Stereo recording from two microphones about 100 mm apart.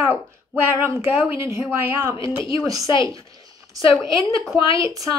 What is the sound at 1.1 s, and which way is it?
Speech, 20° right (ahead or behind).